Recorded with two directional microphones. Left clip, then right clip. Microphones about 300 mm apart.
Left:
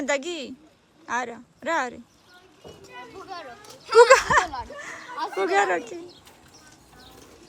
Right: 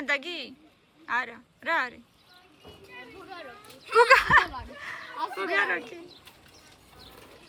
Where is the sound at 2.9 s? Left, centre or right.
Left.